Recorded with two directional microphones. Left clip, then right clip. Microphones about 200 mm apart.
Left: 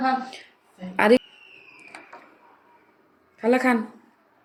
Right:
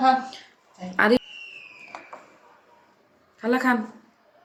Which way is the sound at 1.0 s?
10° left (ahead or behind).